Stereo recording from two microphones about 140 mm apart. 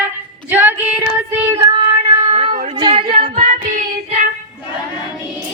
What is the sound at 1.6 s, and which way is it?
Child singing, 45° right (ahead or behind).